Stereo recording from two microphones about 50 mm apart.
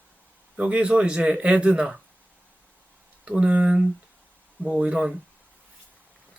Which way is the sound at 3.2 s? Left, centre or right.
Right.